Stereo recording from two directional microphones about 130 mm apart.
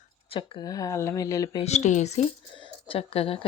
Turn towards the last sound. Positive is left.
turn(degrees=45)  # may be behind; listen again after turning